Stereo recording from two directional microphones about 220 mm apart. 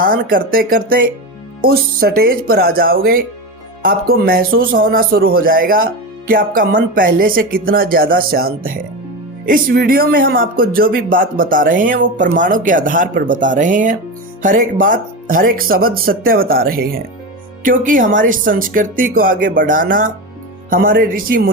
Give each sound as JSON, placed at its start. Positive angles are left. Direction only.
{"t": 0.0, "sound": "speech", "side_deg": -40}